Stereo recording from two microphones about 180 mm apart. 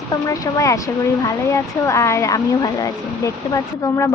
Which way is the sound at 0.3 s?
20° left (ahead or behind).